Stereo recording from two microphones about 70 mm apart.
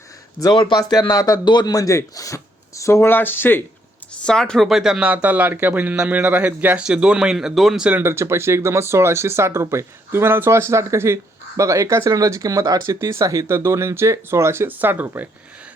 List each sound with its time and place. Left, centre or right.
0.4 s speech: left
0.8 s speech: left
3.1 s speech: left
4.2 s speech: centre
4.7 s speech: centre
4.9 s speech: right; by 7.9 s centre
8.0 s speech: right
14.7 s speech: right